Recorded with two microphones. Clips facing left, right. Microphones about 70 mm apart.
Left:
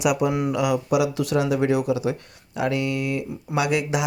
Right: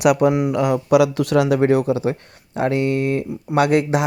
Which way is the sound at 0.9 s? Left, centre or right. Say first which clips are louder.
Right 6 dB; right.